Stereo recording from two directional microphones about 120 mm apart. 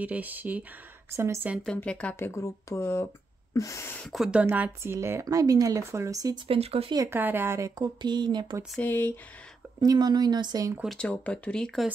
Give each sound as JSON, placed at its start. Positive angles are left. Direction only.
{"t": 0.0, "sound": "speech", "side_deg": -15}
{"t": 1.8, "sound": "speech", "side_deg": 10}
{"t": 2.1, "sound": "speech", "side_deg": 20}
{"t": 4.0, "sound": "speech", "side_deg": 0}
{"t": 4.5, "sound": "speech", "side_deg": -20}
{"t": 6.4, "sound": "speech", "side_deg": -50}
{"t": 7.1, "sound": "speech", "side_deg": -15}
{"t": 7.8, "sound": "speech", "side_deg": -40}
{"t": 8.8, "sound": "speech", "side_deg": 15}
{"t": 9.8, "sound": "speech", "side_deg": -35}
{"t": 11.0, "sound": "speech", "side_deg": 10}